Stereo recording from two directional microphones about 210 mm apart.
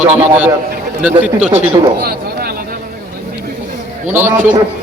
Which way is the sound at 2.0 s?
45° right (ahead or behind).